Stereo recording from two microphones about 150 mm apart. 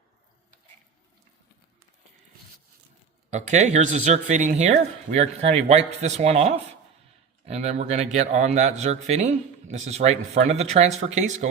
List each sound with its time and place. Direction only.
3.2 s speech: 50° right (ahead or behind)